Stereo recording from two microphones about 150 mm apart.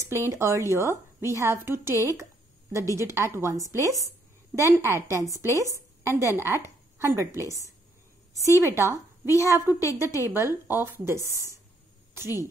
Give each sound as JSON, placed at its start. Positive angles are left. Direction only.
{"t": 0.3, "sound": "a woman's voice", "side_deg": -20}
{"t": 3.0, "sound": "a woman's voice", "side_deg": -20}